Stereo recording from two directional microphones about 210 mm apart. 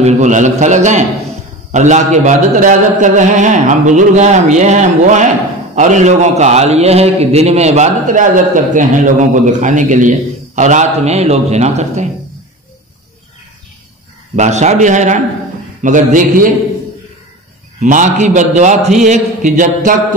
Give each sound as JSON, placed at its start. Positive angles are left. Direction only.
{"t": 0.0, "sound": "a man's voice", "side_deg": -35}
{"t": 14.3, "sound": "a man's voice", "side_deg": -35}
{"t": 17.7, "sound": "a man's voice", "side_deg": -35}